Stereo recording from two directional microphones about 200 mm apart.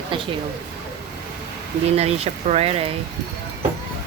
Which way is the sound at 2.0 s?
30° right (ahead or behind).